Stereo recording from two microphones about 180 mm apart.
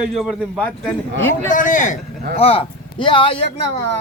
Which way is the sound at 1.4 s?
45° left (ahead or behind).